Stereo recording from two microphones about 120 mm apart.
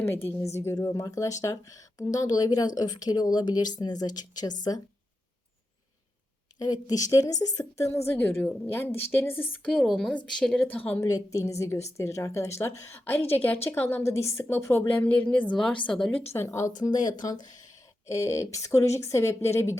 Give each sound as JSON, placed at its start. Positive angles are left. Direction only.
{"t": 0.0, "sound": "speech", "side_deg": 20}
{"t": 6.6, "sound": "a woman's voice", "side_deg": 35}
{"t": 9.6, "sound": "a woman's voice", "side_deg": 0}
{"t": 11.0, "sound": "a woman's voice", "side_deg": 30}
{"t": 16.3, "sound": "a woman's voice", "side_deg": 20}
{"t": 16.7, "sound": "speech", "side_deg": 35}
{"t": 18.0, "sound": "a woman's voice", "side_deg": 25}